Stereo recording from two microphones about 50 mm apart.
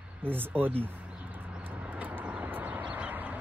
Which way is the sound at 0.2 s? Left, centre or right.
Right.